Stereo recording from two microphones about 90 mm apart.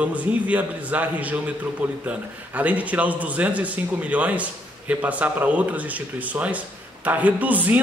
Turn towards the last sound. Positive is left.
turn(degrees=-15)  # may be behind; listen again after turning